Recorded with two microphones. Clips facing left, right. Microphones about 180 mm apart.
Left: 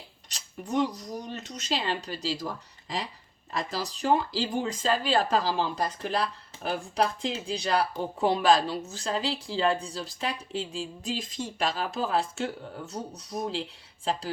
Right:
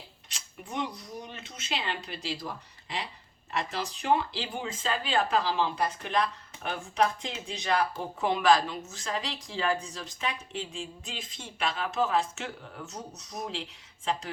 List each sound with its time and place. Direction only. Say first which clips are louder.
0.3 s speech: left 8 dB; 40° left (ahead or behind)
3.5 s speech: left 1 dB; 35° left (ahead or behind)